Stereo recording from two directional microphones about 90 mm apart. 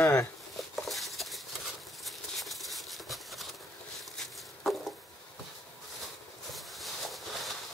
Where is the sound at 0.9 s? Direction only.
Centre (ahead or behind).